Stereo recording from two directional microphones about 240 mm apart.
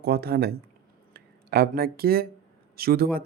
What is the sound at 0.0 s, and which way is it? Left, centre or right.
Speech, right.